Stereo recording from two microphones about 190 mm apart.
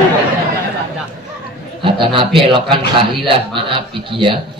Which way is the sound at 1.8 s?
25° right (ahead or behind).